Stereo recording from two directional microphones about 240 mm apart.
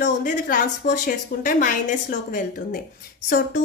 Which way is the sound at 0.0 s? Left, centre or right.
Left.